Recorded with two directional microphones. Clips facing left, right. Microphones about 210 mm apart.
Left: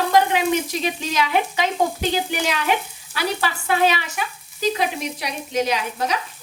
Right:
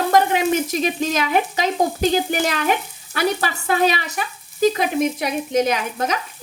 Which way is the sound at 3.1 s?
45° right (ahead or behind).